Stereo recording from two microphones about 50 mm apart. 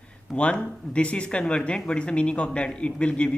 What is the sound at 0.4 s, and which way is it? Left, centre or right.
A man's voice, left.